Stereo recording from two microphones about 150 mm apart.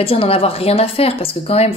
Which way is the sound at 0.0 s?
40° left (ahead or behind).